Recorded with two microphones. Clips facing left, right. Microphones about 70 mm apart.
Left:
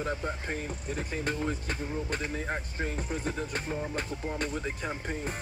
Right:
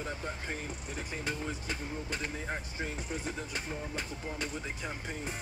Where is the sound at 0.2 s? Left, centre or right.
Left.